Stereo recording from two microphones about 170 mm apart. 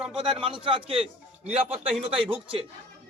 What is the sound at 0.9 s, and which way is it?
Speech, 5° right (ahead or behind).